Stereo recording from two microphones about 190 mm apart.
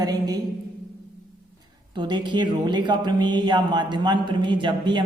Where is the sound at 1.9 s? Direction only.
25° right (ahead or behind).